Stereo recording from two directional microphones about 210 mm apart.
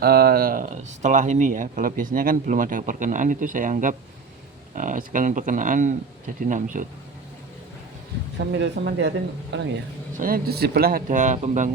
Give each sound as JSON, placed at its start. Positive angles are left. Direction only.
{"t": 0.0, "sound": "speech", "side_deg": -45}
{"t": 8.5, "sound": "speech", "side_deg": -55}
{"t": 10.2, "sound": "speech", "side_deg": -45}